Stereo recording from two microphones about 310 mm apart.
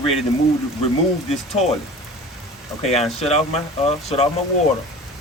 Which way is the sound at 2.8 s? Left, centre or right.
Centre.